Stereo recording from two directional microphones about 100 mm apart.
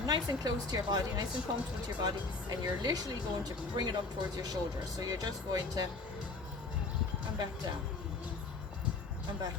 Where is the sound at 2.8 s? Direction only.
40° right (ahead or behind).